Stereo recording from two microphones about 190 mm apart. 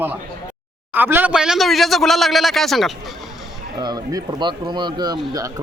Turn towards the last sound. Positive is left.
turn(degrees=-20)  # may be behind; listen again after turning